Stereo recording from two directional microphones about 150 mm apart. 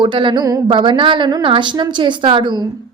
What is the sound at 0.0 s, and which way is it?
A woman's voice, 35° right (ahead or behind).